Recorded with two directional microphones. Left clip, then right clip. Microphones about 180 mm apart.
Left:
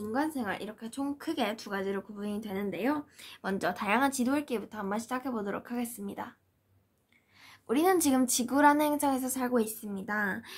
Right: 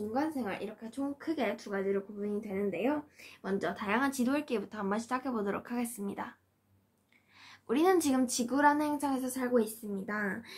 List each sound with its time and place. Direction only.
0.1 s speech: 60° left (ahead or behind); by 6.3 s 10° left (ahead or behind)
7.4 s a woman's voice: 25° left (ahead or behind)